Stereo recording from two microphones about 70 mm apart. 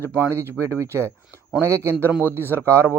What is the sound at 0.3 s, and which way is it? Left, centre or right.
Speech, right.